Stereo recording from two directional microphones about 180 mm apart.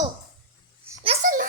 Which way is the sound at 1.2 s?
50° right (ahead or behind).